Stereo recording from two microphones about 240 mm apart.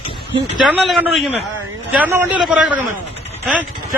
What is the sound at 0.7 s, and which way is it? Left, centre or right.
A man's voice, centre.